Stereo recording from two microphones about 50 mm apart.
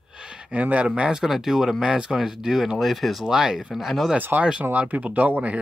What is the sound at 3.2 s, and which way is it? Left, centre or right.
Speech, centre.